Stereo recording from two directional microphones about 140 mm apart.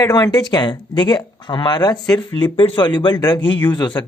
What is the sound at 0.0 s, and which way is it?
Speech, 25° left (ahead or behind).